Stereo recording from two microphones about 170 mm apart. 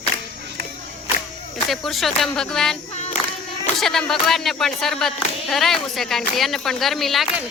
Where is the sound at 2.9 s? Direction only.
40° left (ahead or behind).